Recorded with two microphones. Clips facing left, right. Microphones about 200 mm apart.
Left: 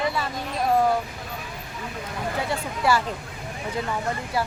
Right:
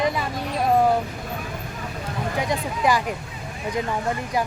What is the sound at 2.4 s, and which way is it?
Speech, 15° right (ahead or behind).